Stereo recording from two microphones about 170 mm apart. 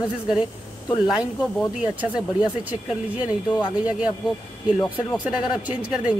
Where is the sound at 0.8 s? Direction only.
25° left (ahead or behind).